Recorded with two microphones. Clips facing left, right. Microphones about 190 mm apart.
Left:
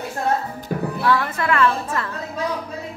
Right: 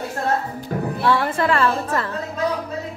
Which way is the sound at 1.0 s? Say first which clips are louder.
Right 2 dB; 30° right (ahead or behind).